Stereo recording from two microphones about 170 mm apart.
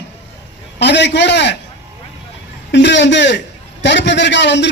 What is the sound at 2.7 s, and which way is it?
A man's voice, 90° left.